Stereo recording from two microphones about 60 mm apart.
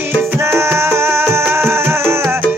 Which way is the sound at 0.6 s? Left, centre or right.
Right.